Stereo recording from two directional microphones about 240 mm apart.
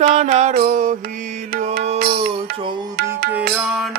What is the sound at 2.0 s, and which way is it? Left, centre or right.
Music, right.